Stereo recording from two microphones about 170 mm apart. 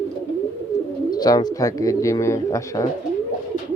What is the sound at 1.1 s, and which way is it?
Speech, 25° left (ahead or behind).